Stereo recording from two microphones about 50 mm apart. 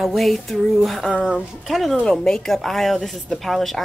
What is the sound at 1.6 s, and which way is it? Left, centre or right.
Speech, centre.